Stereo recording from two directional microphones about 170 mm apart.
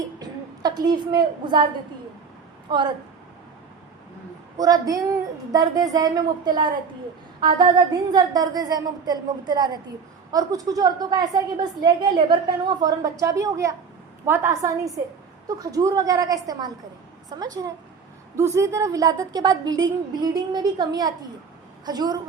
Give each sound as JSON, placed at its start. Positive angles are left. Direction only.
{"t": 0.2, "sound": "a sound", "side_deg": -25}
{"t": 2.6, "sound": "speech", "side_deg": -25}
{"t": 4.5, "sound": "a woman's voice", "side_deg": -20}